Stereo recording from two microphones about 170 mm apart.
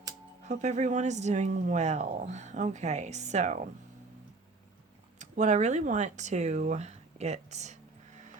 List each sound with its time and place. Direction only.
0.4 s speech: 45° right (ahead or behind)
5.2 s speech: 45° right (ahead or behind)